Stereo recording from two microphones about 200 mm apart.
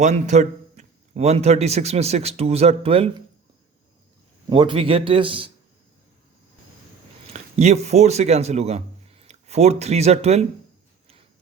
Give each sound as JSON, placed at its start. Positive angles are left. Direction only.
{"t": 0.0, "sound": "speech", "side_deg": -35}
{"t": 4.4, "sound": "a man's voice", "side_deg": -25}
{"t": 7.3, "sound": "a man's voice", "side_deg": -35}